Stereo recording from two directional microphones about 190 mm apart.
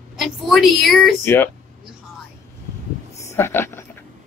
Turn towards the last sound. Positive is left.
turn(degrees=10)  # may be behind; listen again after turning